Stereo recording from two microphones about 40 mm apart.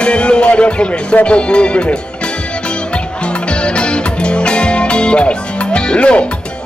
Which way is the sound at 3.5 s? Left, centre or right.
Left.